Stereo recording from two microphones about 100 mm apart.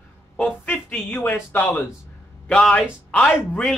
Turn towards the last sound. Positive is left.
turn(degrees=10)  # may be behind; listen again after turning